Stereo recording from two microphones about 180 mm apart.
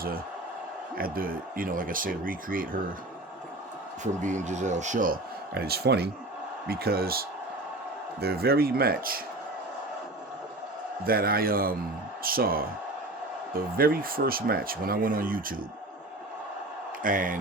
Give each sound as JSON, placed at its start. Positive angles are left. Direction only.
{"t": 0.9, "sound": "speech", "side_deg": -55}
{"t": 4.0, "sound": "speech", "side_deg": -40}
{"t": 11.0, "sound": "speech", "side_deg": -55}
{"t": 17.0, "sound": "speech", "side_deg": -50}